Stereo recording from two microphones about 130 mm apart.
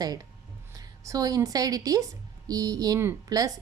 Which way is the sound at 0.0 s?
30° right (ahead or behind).